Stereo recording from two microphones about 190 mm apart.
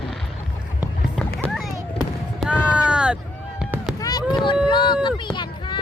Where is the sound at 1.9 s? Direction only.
5° right (ahead or behind).